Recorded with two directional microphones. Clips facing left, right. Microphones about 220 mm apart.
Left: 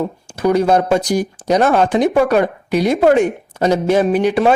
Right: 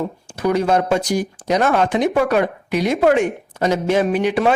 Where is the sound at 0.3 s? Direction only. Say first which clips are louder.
Left 4 dB; 35° left (ahead or behind).